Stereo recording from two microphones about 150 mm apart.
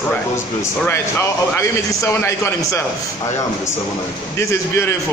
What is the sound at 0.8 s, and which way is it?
A man's voice, 15° left (ahead or behind).